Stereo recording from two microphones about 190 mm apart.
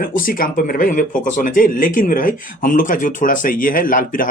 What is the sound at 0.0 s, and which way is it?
Speech, 50° left (ahead or behind).